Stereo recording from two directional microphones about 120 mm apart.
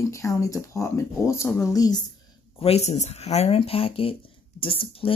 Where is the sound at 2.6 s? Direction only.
60° left (ahead or behind).